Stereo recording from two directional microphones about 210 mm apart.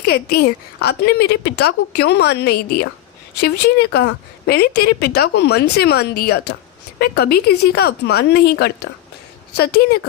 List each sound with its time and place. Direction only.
0.0 s a woman's voice: 50° left (ahead or behind)